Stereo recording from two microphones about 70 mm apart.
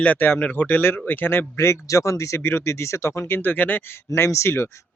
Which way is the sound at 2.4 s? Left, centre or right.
Left.